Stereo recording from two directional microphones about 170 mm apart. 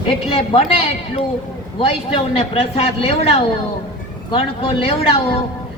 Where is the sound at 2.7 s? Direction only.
35° left (ahead or behind).